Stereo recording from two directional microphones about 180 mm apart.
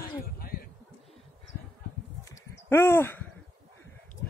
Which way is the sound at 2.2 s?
15° left (ahead or behind).